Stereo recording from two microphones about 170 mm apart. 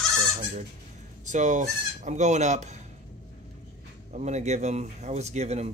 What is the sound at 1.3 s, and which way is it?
Speech, 45° right (ahead or behind).